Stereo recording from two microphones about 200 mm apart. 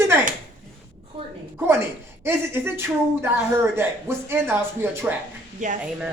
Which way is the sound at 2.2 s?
10° right (ahead or behind).